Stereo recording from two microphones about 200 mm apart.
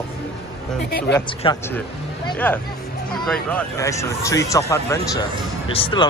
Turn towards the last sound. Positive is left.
turn(degrees=25)  # may be behind; listen again after turning